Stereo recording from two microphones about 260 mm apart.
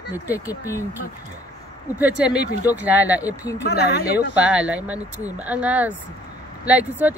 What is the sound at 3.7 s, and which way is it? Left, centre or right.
Speech, left.